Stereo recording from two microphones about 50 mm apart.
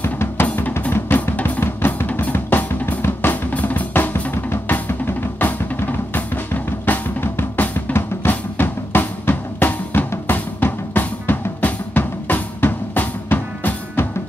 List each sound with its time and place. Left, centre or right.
0.0 s drum: left
3.0 s drum: left
3.5 s drum kit: left
3.9 s drum kit: left
4.8 s drum: left